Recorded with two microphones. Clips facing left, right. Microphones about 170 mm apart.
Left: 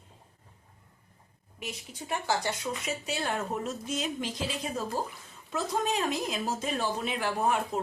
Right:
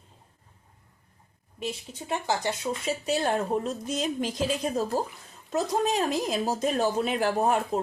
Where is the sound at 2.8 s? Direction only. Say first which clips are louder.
Right 8 dB; 40° right (ahead or behind).